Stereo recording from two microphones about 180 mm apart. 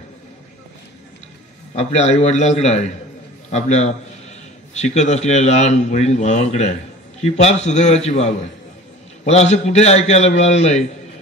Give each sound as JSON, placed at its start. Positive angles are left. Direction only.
{"t": 1.8, "sound": "speech", "side_deg": 40}